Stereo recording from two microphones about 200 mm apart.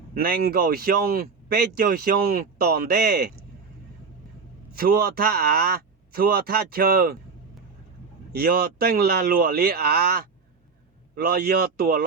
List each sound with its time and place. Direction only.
0.1 s speech: 50° right (ahead or behind)
4.7 s speech: 50° right (ahead or behind)
8.3 s speech: 50° right (ahead or behind)